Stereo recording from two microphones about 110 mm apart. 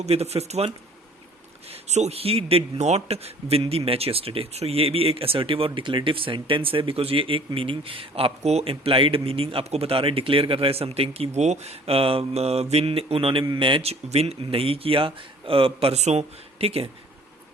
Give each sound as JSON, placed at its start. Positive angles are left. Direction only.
{"t": 0.0, "sound": "speech", "side_deg": -70}
{"t": 1.7, "sound": "speech", "side_deg": -80}
{"t": 8.7, "sound": "speech", "side_deg": -55}
{"t": 11.3, "sound": "speech", "side_deg": -90}
{"t": 14.1, "sound": "speech", "side_deg": -65}